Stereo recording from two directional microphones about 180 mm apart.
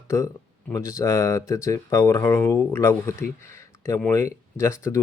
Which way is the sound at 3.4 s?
15° left (ahead or behind).